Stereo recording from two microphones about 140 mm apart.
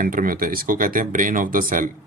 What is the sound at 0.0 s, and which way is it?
Speech, 85° right.